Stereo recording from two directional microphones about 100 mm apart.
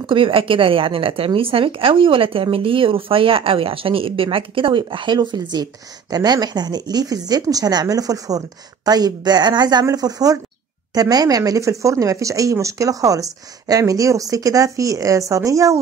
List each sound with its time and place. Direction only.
0.0 s a woman's voice: 60° right (ahead or behind); by 15.8 s 35° right (ahead or behind)